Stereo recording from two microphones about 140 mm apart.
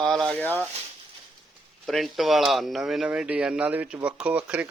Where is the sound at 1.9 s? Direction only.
Centre (ahead or behind).